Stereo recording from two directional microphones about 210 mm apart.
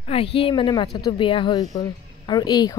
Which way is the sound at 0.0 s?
25° left (ahead or behind).